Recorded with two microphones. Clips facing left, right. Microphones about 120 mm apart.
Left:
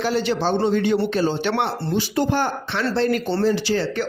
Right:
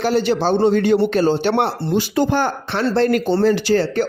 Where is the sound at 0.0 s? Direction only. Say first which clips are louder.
Right 4 dB; 45° right (ahead or behind).